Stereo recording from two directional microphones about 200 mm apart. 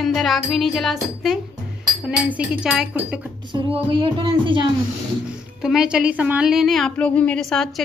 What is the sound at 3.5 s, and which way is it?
Speech, 25° right (ahead or behind).